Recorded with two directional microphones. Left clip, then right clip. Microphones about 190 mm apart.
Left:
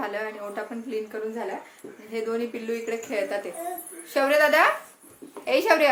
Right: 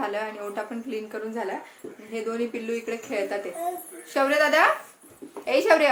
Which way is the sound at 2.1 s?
10° left (ahead or behind).